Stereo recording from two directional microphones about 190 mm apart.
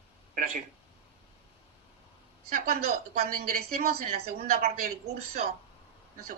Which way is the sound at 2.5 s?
45° right (ahead or behind).